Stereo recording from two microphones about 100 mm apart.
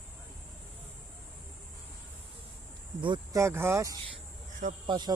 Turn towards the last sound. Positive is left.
turn(degrees=-45)  # may be behind; listen again after turning